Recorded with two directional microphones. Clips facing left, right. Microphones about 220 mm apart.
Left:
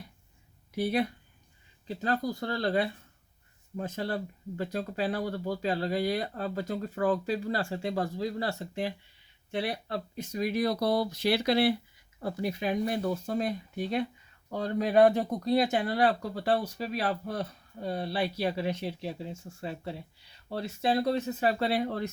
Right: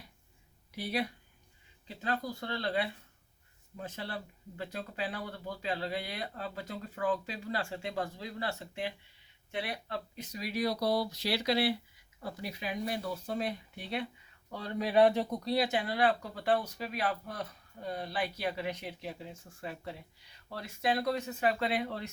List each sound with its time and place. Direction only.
0.8 s speech: 50° left (ahead or behind)